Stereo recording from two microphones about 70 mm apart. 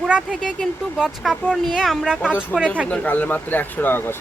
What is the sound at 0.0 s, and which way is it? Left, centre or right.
Speech, centre.